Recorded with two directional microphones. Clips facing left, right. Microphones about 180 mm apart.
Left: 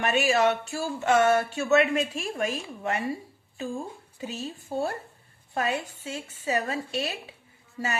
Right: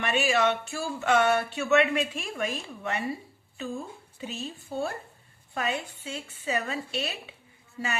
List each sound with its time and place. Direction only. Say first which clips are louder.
0.0 s speech: left 2 dB; 40° left (ahead or behind)